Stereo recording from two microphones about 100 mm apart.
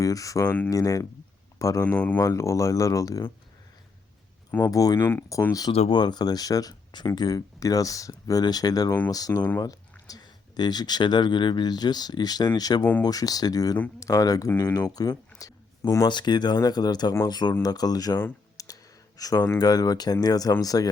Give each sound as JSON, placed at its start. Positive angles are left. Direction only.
{"t": 0.0, "sound": "speech", "side_deg": 35}
{"t": 1.8, "sound": "speech", "side_deg": 15}
{"t": 2.1, "sound": "speech", "side_deg": 35}
{"t": 4.7, "sound": "speech", "side_deg": 35}
{"t": 4.9, "sound": "speech", "side_deg": 25}
{"t": 5.9, "sound": "speech", "side_deg": 45}
{"t": 18.5, "sound": "clicking", "side_deg": 35}
{"t": 19.5, "sound": "speech", "side_deg": 40}